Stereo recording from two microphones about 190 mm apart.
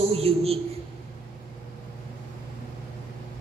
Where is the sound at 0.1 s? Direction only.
30° right (ahead or behind).